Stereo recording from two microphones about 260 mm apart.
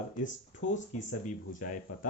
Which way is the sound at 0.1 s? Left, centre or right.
Left.